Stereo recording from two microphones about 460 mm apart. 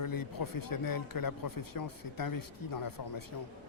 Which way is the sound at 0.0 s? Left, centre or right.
Left.